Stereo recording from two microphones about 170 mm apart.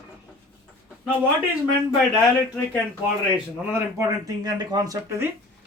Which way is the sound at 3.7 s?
20° right (ahead or behind).